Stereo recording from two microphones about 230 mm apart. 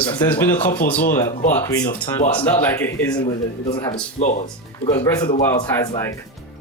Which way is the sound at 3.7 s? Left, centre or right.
Centre.